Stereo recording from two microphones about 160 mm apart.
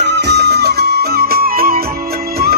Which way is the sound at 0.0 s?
90° right.